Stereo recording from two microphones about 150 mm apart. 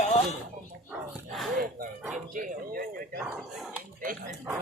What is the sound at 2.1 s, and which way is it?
Speech, 65° right (ahead or behind).